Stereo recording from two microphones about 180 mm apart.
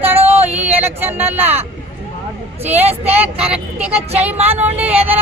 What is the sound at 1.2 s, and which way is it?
Speech, 10° right (ahead or behind).